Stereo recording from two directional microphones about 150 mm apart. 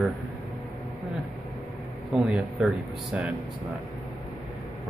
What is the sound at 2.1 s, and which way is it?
Speech, 5° right (ahead or behind).